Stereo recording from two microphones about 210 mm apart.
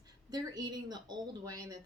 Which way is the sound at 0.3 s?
20° right (ahead or behind).